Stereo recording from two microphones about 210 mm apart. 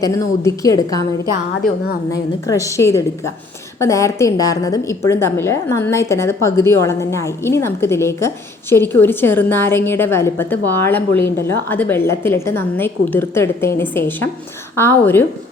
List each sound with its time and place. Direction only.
0.0 s a woman's voice: 15° left (ahead or behind)
2.5 s a woman's voice: 15° left (ahead or behind)